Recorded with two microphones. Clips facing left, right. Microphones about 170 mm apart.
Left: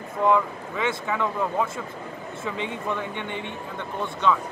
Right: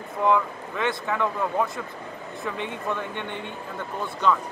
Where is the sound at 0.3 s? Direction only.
Centre (ahead or behind).